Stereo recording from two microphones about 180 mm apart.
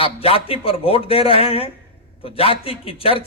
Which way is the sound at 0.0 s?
30° left (ahead or behind).